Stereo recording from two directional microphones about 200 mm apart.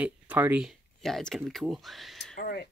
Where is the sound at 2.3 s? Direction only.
50° left (ahead or behind).